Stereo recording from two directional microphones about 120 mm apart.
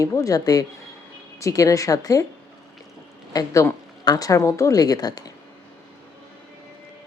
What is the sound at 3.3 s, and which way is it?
A woman's voice, 25° left (ahead or behind).